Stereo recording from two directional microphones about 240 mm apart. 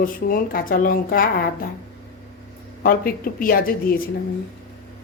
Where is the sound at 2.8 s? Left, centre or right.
Left.